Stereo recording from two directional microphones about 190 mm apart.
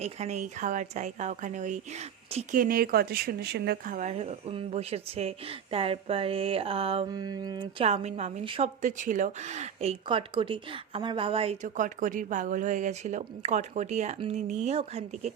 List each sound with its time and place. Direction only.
0.0 s speech: 35° right (ahead or behind)
7.1 s speech: 20° right (ahead or behind)